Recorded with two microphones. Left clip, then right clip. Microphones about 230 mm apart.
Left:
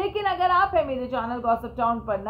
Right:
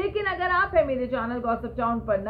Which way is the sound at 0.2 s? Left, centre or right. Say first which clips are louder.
Left 8 dB; left.